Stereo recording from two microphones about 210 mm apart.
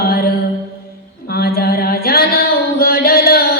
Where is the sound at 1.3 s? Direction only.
45° left (ahead or behind).